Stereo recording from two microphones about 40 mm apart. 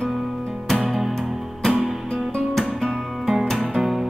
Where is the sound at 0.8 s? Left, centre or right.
Centre.